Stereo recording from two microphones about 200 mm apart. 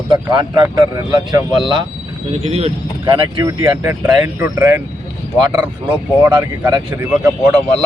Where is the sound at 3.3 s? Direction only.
15° right (ahead or behind).